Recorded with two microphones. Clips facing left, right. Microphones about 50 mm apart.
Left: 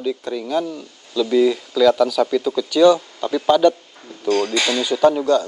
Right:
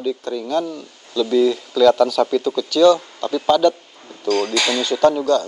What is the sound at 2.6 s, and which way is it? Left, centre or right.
Speech, centre.